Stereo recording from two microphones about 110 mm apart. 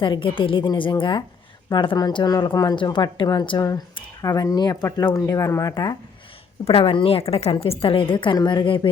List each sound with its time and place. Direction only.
0.0 s speech: 50° left (ahead or behind)
4.2 s speech: 35° left (ahead or behind)
5.7 s speech: 40° left (ahead or behind)
6.7 s a woman's voice: 55° left (ahead or behind)